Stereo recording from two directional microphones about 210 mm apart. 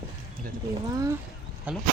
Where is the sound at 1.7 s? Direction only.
5° right (ahead or behind).